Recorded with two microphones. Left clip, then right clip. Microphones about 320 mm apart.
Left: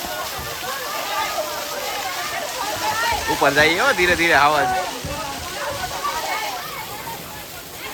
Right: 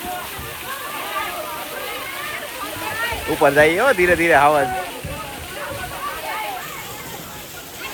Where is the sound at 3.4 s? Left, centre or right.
Centre.